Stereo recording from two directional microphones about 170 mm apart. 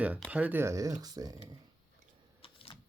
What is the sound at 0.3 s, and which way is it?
Speech, 10° right (ahead or behind).